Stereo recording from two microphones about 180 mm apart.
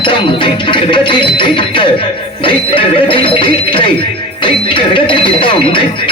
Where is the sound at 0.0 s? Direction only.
25° left (ahead or behind).